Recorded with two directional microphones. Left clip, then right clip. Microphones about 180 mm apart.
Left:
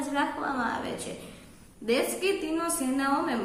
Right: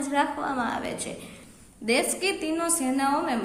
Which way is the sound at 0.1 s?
40° right (ahead or behind).